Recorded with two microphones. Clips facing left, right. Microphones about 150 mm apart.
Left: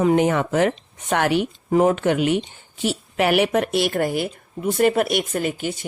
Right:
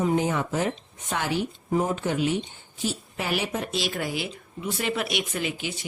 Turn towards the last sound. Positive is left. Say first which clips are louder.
# left 6 dB
turn(degrees=50)  # may be behind; listen again after turning